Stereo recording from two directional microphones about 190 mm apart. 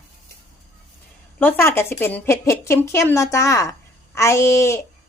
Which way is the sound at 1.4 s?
10° left (ahead or behind).